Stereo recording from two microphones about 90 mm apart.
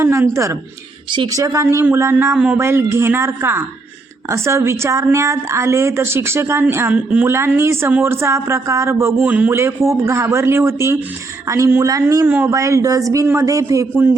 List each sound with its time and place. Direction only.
0.0 s a woman's voice: 35° right (ahead or behind)
1.7 s a man's voice: 25° right (ahead or behind)
2.3 s speech: 10° right (ahead or behind)
2.6 s a man's voice: 30° right (ahead or behind)
7.3 s a man's voice: 30° right (ahead or behind)
9.3 s speech: 20° right (ahead or behind)
9.6 s a man's voice: 30° right (ahead or behind)
12.2 s a man's voice: 25° right (ahead or behind)
12.5 s a woman's voice: 35° right (ahead or behind)